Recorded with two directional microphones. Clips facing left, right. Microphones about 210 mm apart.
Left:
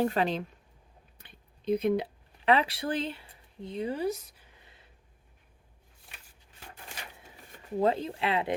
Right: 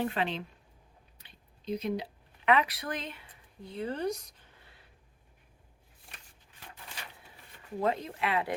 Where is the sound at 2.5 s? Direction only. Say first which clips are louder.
Left 2 dB; 30° left (ahead or behind).